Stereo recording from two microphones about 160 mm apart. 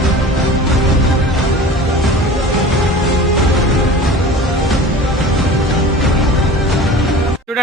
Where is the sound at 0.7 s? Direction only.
Centre (ahead or behind).